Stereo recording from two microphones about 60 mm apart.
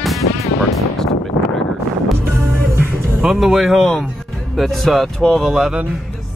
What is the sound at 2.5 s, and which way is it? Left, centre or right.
Music, right.